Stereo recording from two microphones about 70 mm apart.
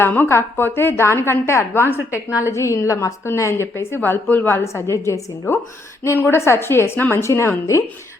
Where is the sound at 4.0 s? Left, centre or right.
Left.